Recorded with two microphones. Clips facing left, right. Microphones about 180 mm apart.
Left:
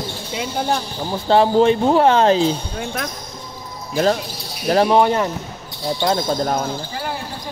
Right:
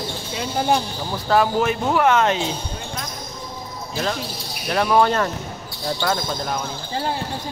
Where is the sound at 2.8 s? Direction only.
70° left (ahead or behind).